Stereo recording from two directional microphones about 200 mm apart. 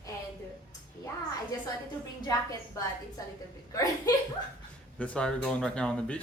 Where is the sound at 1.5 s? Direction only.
20° left (ahead or behind).